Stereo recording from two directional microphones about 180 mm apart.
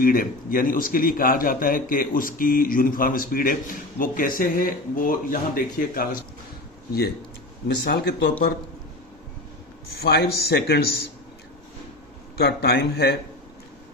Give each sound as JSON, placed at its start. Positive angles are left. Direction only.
{"t": 0.0, "sound": "speech", "side_deg": 50}
{"t": 7.9, "sound": "a man's voice", "side_deg": 65}
{"t": 10.0, "sound": "a man's voice", "side_deg": 60}
{"t": 12.4, "sound": "a man's voice", "side_deg": 60}